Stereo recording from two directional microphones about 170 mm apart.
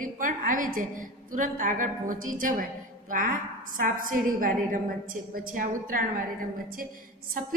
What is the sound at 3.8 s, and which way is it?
Speech, 55° right (ahead or behind).